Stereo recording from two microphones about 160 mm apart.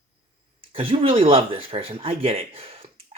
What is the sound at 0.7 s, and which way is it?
Speech, 35° right (ahead or behind).